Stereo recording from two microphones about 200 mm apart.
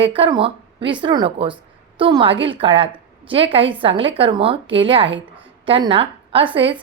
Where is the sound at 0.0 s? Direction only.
25° right (ahead or behind).